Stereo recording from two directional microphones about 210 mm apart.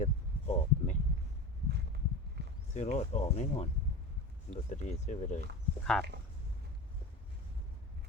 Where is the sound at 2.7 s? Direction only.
35° left (ahead or behind).